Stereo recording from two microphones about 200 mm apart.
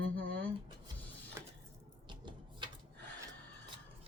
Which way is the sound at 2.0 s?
25° right (ahead or behind).